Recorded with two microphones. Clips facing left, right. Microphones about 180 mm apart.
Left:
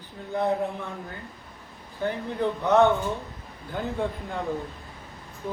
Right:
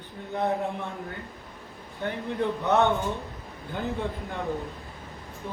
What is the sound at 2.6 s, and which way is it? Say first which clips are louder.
Speech: left 4 dB; 25° right (ahead or behind).